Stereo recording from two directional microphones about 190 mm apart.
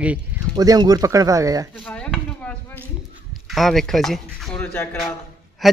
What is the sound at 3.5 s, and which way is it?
Speech, centre (ahead or behind).